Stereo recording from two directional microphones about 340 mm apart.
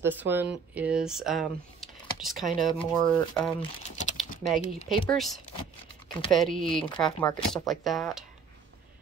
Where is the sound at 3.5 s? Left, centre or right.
Left.